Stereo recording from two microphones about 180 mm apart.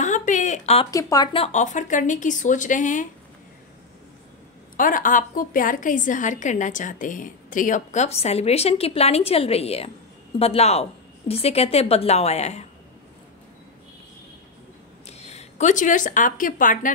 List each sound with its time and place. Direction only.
0.0 s a sound: 45° left (ahead or behind)
0.9 s speech: 20° left (ahead or behind)
1.4 s a woman's voice: 40° left (ahead or behind)
4.7 s a woman's voice: 50° left (ahead or behind)
15.0 s a woman's voice: 35° left (ahead or behind)